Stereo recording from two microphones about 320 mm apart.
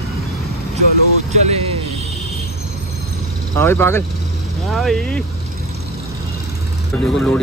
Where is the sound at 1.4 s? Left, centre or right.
Centre.